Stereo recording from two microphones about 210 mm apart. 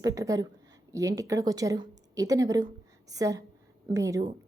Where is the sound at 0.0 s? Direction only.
15° right (ahead or behind).